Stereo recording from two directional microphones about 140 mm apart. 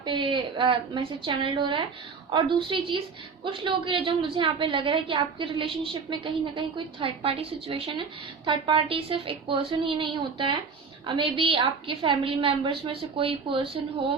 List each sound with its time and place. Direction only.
0.0 s a woman's voice: 35° right (ahead or behind)